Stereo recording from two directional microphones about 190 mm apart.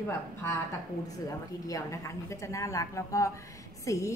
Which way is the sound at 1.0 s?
20° left (ahead or behind).